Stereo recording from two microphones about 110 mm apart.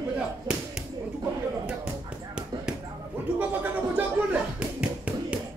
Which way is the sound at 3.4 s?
15° right (ahead or behind).